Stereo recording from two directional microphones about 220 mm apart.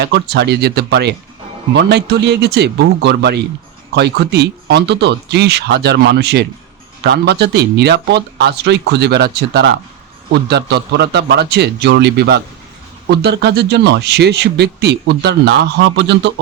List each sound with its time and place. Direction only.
0.0 s speech: 50° right (ahead or behind)